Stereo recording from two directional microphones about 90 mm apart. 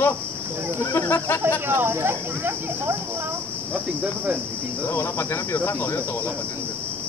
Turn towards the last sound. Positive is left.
turn(degrees=20)  # may be behind; listen again after turning